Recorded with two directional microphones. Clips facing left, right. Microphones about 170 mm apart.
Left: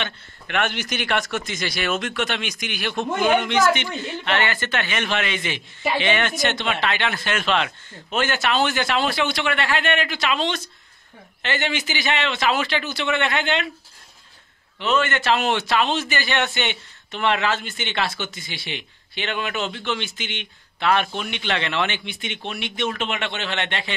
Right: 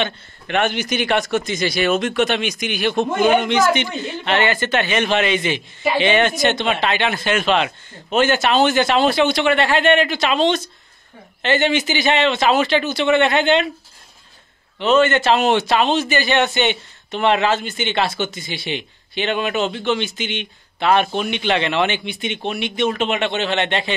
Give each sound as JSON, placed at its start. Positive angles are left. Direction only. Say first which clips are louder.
{"t": 0.0, "sound": "speech", "louder": "right 7 dB", "side_deg": -20}
{"t": 14.8, "sound": "speech", "louder": "right 7 dB", "side_deg": -25}